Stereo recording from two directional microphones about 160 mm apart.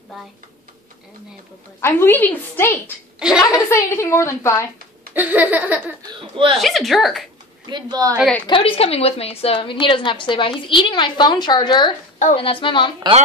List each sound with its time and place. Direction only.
1.8 s a woman's voice: 15° left (ahead or behind)
3.2 s a woman's voice: 5° right (ahead or behind)
3.5 s a woman's voice: 15° left (ahead or behind)
5.1 s a sound: 10° right (ahead or behind)
6.6 s speech: centre (ahead or behind)
7.6 s speech: 25° right (ahead or behind)
8.5 s a woman's voice: 35° left (ahead or behind)